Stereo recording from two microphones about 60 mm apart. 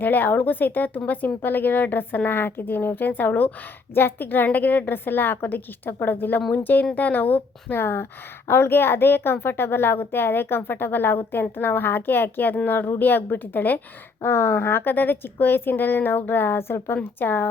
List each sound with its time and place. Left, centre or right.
0.0 s a woman's voice: left
14.2 s a woman's voice: left